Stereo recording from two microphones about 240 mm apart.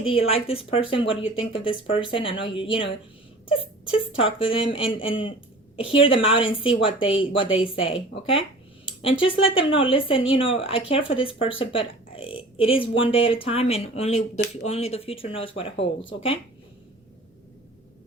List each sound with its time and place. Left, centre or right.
0.1 s speech: left